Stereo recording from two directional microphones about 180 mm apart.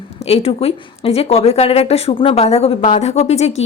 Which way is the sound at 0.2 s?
35° left (ahead or behind).